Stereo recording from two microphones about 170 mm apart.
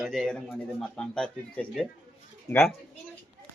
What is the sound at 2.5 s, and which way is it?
Speech, 20° left (ahead or behind).